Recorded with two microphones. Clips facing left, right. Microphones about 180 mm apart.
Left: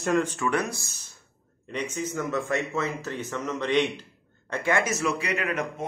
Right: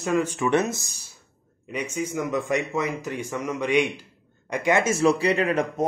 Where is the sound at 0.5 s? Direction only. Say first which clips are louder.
Right 5 dB; 20° right (ahead or behind).